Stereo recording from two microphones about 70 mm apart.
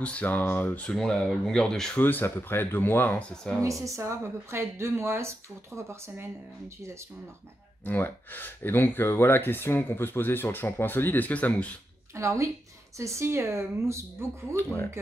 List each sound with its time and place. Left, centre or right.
0.0 s speech: left
0.9 s speech: centre
2.0 s speech: left
3.2 s speech: centre
3.6 s speech: right
7.8 s speech: left
12.2 s speech: right
14.6 s speech: left